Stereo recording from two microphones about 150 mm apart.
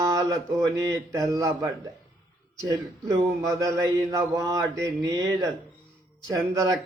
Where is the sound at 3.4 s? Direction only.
20° right (ahead or behind).